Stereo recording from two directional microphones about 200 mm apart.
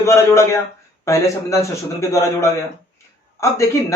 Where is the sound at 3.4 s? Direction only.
15° left (ahead or behind).